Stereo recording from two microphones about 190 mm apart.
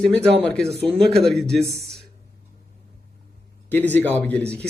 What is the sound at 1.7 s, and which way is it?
Speech, 60° right (ahead or behind).